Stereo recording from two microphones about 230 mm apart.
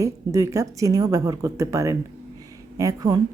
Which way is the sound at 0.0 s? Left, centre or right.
Centre.